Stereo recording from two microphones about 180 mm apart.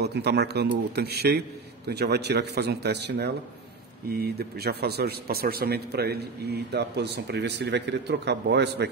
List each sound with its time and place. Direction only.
0.0 s a man's voice: 65° right (ahead or behind)